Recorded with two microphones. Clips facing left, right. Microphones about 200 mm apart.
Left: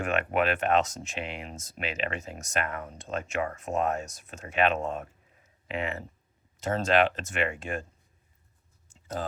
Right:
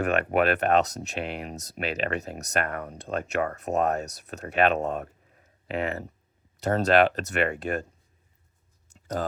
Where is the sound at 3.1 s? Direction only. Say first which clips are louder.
Right 4 dB; 65° right (ahead or behind).